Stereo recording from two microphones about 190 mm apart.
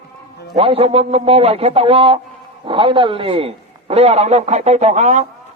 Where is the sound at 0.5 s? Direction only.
30° right (ahead or behind).